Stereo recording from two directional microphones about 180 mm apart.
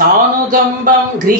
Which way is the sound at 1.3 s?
50° right (ahead or behind).